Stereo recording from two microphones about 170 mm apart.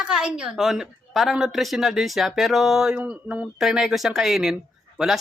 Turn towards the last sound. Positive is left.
turn(degrees=0)  # may be behind; listen again after turning